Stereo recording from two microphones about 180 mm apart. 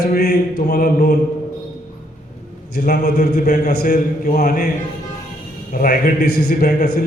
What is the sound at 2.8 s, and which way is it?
A man's voice, 60° left (ahead or behind).